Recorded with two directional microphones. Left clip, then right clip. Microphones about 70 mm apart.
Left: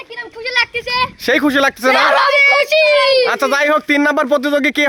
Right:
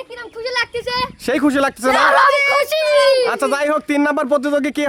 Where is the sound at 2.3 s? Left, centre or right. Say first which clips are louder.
Left 4 dB; right.